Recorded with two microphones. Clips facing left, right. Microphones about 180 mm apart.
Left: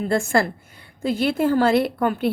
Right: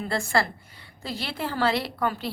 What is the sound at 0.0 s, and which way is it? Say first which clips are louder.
A woman's voice: left 6 dB; 50° left (ahead or behind).